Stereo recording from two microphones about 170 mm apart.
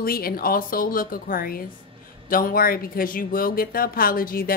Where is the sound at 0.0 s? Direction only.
60° left (ahead or behind).